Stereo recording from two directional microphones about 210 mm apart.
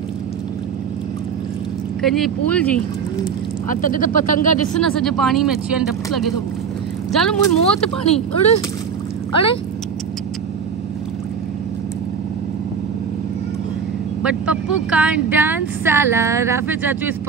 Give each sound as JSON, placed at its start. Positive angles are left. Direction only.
{"t": 2.0, "sound": "speech", "side_deg": 0}
{"t": 3.6, "sound": "speech", "side_deg": 40}
{"t": 4.7, "sound": "speech", "side_deg": 0}
{"t": 7.1, "sound": "speech", "side_deg": 0}
{"t": 8.0, "sound": "speech", "side_deg": 30}
{"t": 14.2, "sound": "speech", "side_deg": -5}